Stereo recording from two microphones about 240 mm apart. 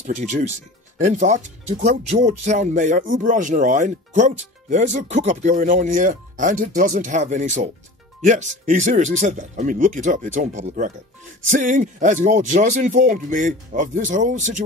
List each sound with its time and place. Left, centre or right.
0.0 s speech: right